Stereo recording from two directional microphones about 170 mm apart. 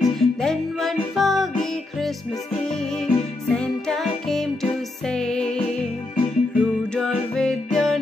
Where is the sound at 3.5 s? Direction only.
5° left (ahead or behind).